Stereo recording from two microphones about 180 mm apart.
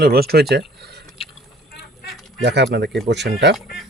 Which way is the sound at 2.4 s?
70° right (ahead or behind).